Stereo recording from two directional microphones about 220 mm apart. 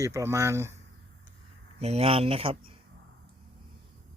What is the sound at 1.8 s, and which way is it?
Speech, 30° right (ahead or behind).